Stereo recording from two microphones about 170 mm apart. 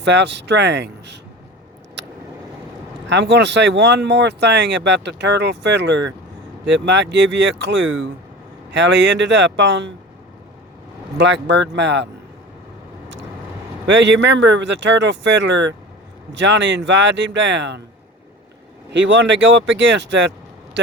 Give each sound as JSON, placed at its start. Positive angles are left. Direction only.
{"t": 0.0, "sound": "speech", "side_deg": -90}
{"t": 2.0, "sound": "vehicle", "side_deg": -90}
{"t": 3.1, "sound": "speech", "side_deg": -90}
{"t": 11.2, "sound": "speech", "side_deg": -90}
{"t": 13.8, "sound": "speech", "side_deg": -90}
{"t": 18.9, "sound": "speech", "side_deg": -90}
{"t": 20.8, "sound": "a sound", "side_deg": -90}